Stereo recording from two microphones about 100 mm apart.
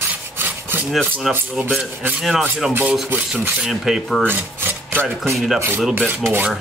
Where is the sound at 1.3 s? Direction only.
5° right (ahead or behind).